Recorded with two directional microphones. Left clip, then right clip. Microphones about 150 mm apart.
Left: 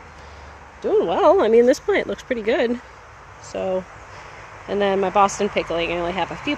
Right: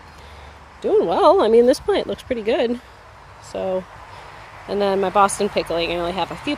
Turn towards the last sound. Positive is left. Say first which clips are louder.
# even
turn(degrees=-15)  # may be behind; listen again after turning